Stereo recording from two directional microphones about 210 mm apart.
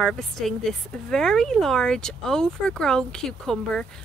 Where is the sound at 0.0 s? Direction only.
Centre (ahead or behind).